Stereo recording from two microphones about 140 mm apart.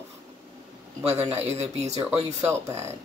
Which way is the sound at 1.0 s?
50° right (ahead or behind).